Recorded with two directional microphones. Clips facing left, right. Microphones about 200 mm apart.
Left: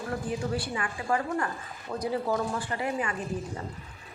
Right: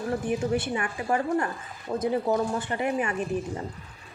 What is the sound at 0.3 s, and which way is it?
A woman's voice, 25° right (ahead or behind).